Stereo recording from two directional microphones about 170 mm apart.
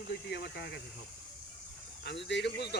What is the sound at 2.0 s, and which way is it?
Speech, 90° left.